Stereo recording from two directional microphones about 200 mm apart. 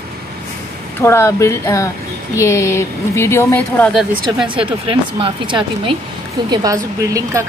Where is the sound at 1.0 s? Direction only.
15° left (ahead or behind).